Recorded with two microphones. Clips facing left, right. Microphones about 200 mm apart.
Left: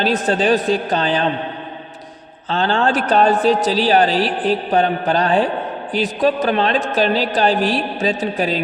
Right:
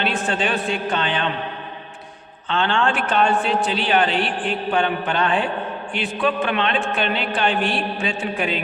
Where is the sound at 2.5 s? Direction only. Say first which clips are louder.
Left 3 dB; 35° left (ahead or behind).